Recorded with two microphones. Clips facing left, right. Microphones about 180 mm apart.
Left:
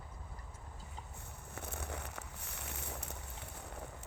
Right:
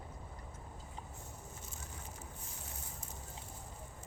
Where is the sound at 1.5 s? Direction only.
65° left (ahead or behind).